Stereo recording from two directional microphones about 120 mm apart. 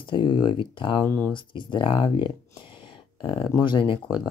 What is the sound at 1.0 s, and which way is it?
Speech, 15° left (ahead or behind).